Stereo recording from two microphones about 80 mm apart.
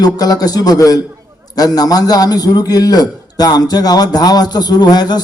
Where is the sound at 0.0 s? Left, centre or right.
Left.